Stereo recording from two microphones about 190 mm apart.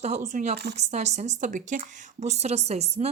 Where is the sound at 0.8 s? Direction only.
35° right (ahead or behind).